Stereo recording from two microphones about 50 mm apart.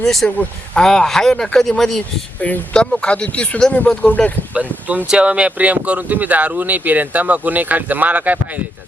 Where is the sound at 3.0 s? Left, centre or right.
Left.